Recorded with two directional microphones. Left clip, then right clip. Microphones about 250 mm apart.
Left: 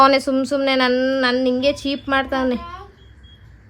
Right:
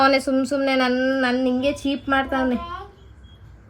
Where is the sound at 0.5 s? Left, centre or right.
Left.